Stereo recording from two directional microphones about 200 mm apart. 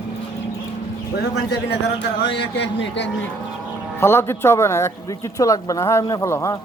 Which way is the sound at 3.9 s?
10° left (ahead or behind).